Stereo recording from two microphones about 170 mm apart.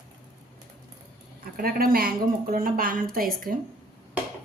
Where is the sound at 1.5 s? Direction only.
60° right (ahead or behind).